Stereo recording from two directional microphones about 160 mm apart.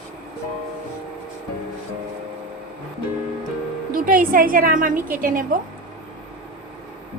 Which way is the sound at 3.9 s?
60° right (ahead or behind).